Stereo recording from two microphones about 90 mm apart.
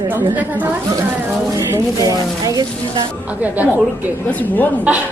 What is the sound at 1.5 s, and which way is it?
Speech, 40° right (ahead or behind).